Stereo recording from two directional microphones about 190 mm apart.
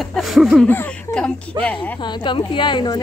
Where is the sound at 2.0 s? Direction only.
25° left (ahead or behind).